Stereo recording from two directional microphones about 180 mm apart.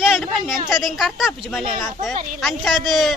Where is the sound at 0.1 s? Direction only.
Centre (ahead or behind).